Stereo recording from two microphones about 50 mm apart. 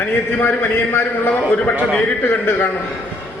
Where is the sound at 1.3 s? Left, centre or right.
Left.